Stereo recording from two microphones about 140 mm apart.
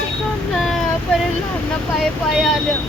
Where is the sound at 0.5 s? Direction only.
Centre (ahead or behind).